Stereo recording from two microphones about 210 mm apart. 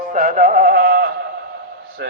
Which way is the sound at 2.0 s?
50° right (ahead or behind).